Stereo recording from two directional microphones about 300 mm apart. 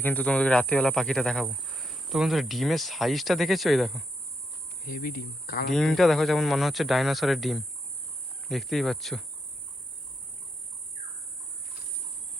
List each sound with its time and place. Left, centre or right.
0.0 s speech: centre
4.9 s speech: left
5.7 s speech: centre